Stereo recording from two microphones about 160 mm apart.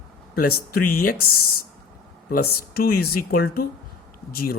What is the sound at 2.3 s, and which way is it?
Speech, 70° left (ahead or behind).